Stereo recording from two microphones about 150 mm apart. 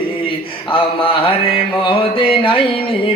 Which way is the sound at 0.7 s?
35° left (ahead or behind).